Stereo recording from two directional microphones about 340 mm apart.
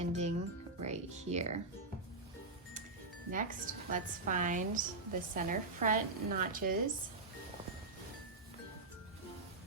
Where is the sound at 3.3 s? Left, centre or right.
Right.